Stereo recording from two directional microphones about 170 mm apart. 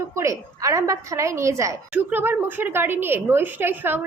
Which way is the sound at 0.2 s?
20° right (ahead or behind).